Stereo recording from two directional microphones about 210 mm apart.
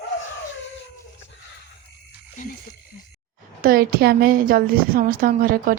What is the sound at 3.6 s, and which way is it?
A woman's voice, 45° right (ahead or behind).